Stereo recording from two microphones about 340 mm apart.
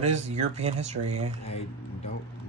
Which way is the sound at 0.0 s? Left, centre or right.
Centre.